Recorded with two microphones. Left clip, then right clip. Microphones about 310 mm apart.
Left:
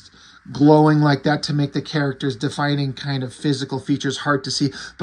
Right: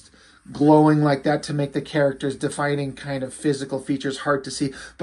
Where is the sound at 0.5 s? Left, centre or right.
Left.